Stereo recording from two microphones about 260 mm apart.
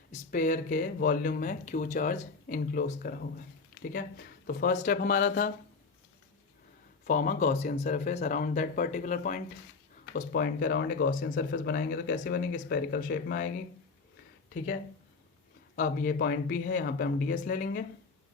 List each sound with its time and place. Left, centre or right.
0.1 s speech: left
4.4 s speech: left
7.1 s speech: left
15.7 s speech: left